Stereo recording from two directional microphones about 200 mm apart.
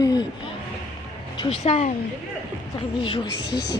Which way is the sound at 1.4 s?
30° left (ahead or behind).